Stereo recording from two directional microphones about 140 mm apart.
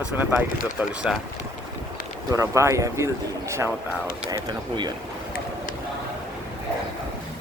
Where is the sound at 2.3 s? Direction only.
20° right (ahead or behind).